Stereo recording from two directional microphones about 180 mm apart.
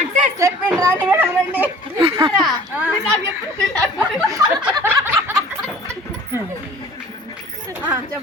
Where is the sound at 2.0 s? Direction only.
30° right (ahead or behind).